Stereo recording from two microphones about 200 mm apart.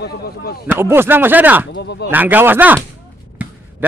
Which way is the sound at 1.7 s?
60° left (ahead or behind).